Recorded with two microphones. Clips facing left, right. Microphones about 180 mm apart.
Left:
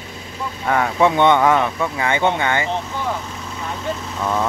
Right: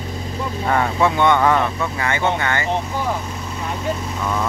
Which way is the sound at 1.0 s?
20° left (ahead or behind).